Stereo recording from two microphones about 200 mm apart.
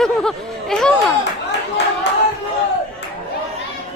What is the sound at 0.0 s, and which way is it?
Speech, centre (ahead or behind).